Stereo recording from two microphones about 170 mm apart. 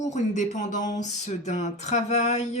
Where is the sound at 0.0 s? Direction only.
45° left (ahead or behind).